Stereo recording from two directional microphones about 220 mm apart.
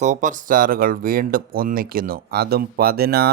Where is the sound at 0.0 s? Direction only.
35° right (ahead or behind).